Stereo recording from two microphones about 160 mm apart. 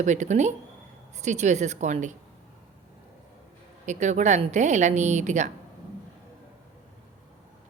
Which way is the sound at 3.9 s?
50° right (ahead or behind).